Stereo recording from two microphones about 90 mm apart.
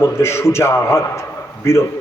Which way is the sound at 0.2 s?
30° left (ahead or behind).